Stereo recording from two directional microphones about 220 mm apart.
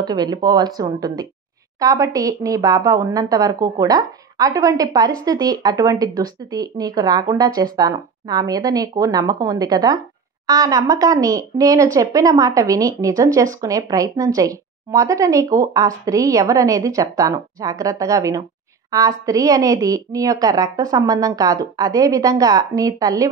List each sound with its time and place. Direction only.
0.0 s speech: 20° right (ahead or behind)